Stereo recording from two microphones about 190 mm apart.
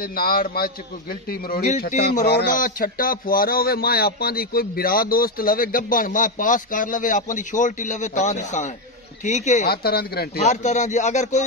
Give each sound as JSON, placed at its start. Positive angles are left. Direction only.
{"t": 0.0, "sound": "speech", "side_deg": 50}
{"t": 1.8, "sound": "speech", "side_deg": 45}
{"t": 9.7, "sound": "speech", "side_deg": 55}
{"t": 10.4, "sound": "speech", "side_deg": 40}